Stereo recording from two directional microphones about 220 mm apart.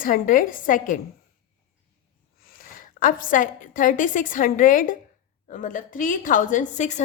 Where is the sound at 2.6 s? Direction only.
40° left (ahead or behind).